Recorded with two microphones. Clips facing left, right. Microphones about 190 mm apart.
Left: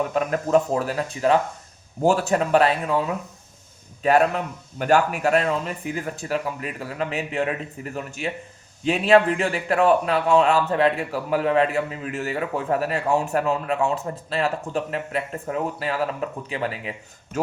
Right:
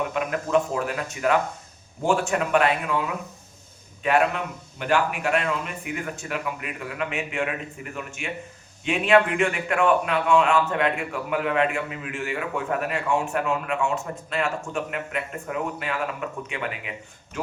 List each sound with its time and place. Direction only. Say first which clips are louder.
0.1 s a man's voice: left 3 dB; 35° left (ahead or behind)